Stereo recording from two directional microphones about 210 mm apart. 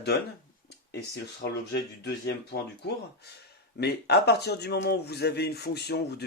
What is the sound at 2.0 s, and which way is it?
Speech, 50° left (ahead or behind).